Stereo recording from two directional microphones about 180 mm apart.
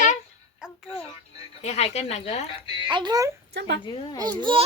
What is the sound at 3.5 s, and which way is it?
Speech, 65° right (ahead or behind).